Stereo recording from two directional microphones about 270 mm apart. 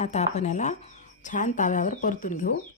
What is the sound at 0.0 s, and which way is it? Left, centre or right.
Speech, left.